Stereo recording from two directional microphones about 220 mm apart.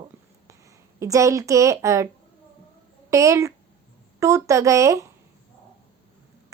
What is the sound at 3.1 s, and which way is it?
A woman's voice, 15° right (ahead or behind).